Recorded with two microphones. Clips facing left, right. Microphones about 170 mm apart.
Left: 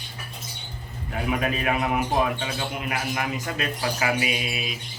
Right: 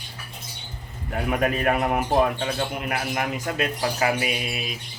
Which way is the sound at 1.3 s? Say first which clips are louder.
Right 3 dB; 50° right (ahead or behind).